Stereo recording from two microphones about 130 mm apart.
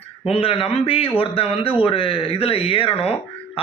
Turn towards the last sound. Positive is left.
turn(degrees=45)  # may be behind; listen again after turning